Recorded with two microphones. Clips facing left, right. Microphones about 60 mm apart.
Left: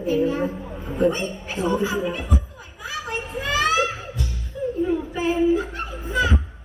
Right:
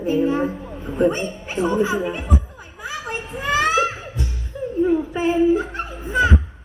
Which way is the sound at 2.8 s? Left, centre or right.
Right.